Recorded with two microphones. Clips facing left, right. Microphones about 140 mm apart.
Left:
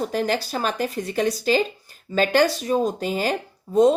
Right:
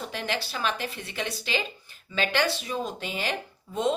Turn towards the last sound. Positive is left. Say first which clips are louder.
# left 10 dB
turn(degrees=40)  # may be behind; listen again after turning